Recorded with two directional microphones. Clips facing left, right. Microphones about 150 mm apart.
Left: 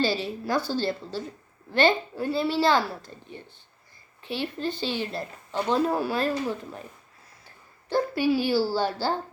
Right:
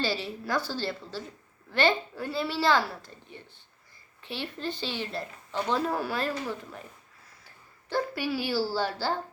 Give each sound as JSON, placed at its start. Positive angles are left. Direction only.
{"t": 0.0, "sound": "speech", "side_deg": 15}
{"t": 4.2, "sound": "speech", "side_deg": 15}
{"t": 7.9, "sound": "speech", "side_deg": 20}